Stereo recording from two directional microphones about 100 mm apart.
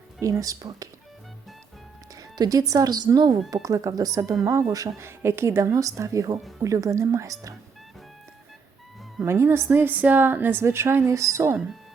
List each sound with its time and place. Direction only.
0.2 s speech: 35° right (ahead or behind)
2.1 s a woman's voice: 40° right (ahead or behind)
9.2 s a woman's voice: 25° right (ahead or behind)